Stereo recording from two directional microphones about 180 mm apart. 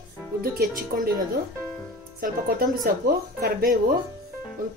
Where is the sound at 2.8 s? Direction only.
60° right (ahead or behind).